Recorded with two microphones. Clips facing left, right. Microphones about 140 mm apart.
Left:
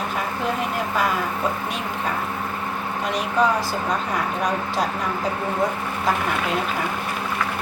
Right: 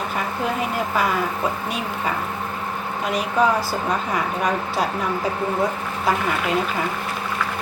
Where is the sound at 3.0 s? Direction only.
5° right (ahead or behind).